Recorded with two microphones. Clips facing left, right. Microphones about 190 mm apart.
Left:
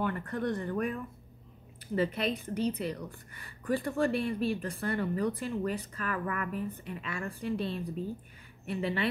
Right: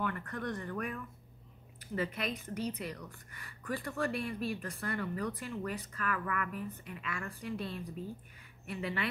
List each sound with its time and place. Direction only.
0.0 s a woman's voice: 30° left (ahead or behind)